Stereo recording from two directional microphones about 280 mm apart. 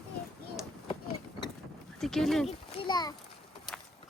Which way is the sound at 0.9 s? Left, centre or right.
Centre.